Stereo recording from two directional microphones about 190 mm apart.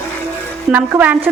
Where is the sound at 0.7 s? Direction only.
10° right (ahead or behind).